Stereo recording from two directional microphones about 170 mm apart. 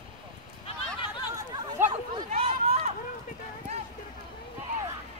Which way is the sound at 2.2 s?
35° right (ahead or behind).